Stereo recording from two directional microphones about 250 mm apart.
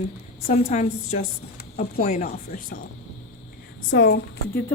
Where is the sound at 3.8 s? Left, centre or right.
Left.